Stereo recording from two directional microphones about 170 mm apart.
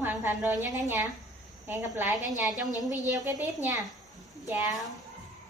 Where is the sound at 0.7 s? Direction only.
15° right (ahead or behind).